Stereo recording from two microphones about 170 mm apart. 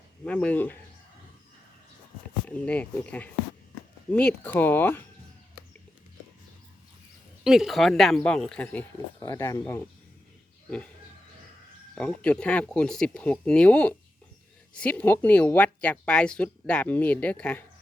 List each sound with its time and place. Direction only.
0.3 s speech: 10° left (ahead or behind)
2.5 s speech: 10° left (ahead or behind)
7.4 s speech: centre (ahead or behind)
9.2 s speech: 20° left (ahead or behind)
11.9 s speech: 5° left (ahead or behind)